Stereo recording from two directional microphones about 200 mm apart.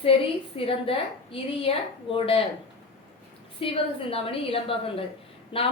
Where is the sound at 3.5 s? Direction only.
30° left (ahead or behind).